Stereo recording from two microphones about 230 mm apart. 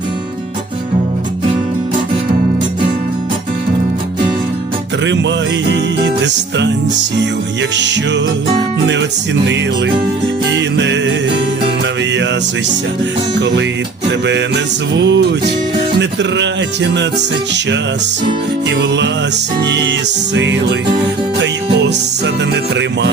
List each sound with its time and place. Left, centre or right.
7.8 s music: right
10.5 s music: right
14.3 s music: right
18.8 s music: right